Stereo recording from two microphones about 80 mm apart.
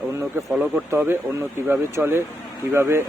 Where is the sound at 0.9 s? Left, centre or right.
Right.